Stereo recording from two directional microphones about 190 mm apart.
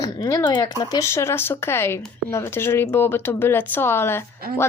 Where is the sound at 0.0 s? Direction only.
20° left (ahead or behind).